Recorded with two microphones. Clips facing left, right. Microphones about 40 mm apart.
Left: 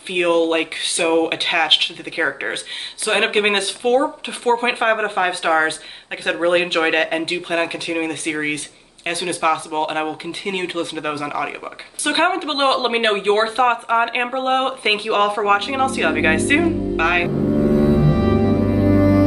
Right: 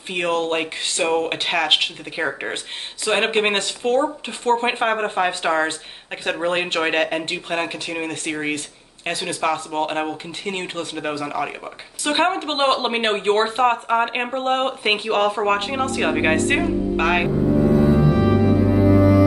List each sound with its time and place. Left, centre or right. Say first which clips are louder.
0.1 s speech: left 5 dB; centre